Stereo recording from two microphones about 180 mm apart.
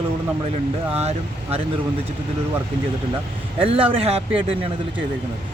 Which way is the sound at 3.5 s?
30° right (ahead or behind).